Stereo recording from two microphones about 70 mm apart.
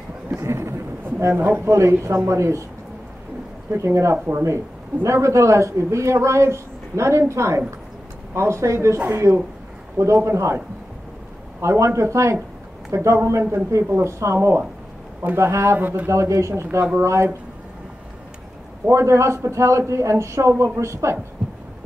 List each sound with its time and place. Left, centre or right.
0.3 s a sound: right
1.3 s speech: right
1.7 s speech: right
3.7 s speech: right
11.6 s speech: right
18.9 s speech: right